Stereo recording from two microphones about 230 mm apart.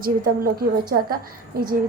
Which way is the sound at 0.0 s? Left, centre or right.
Right.